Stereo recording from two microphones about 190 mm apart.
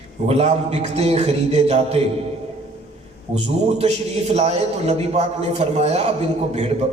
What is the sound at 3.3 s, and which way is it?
A man's voice, 35° right (ahead or behind).